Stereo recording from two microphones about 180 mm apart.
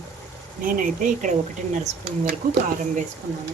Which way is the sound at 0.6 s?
45° right (ahead or behind).